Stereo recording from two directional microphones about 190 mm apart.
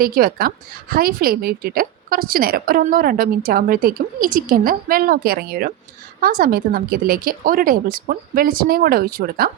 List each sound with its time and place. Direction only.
0.0 s a woman's voice: 50° right (ahead or behind)